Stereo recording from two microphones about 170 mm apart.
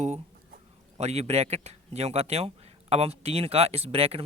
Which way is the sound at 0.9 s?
40° right (ahead or behind).